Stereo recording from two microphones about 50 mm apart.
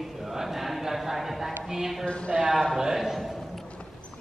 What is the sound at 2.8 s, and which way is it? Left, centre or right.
Speech, centre.